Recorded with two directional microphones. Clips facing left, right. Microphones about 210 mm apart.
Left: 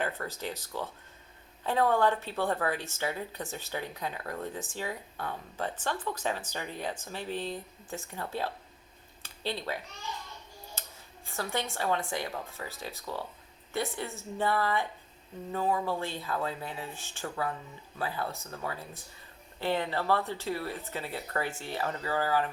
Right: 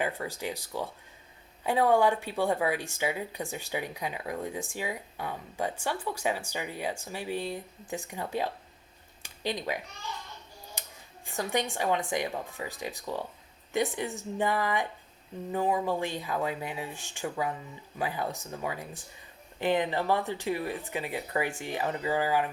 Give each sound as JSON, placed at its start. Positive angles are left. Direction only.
{"t": 0.0, "sound": "a woman's voice", "side_deg": -10}
{"t": 10.8, "sound": "a sound", "side_deg": -15}
{"t": 11.3, "sound": "a woman's voice", "side_deg": -15}